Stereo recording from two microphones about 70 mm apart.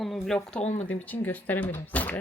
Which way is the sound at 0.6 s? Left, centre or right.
Left.